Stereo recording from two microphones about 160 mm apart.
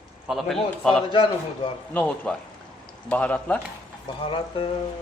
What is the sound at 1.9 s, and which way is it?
Speech, 5° left (ahead or behind).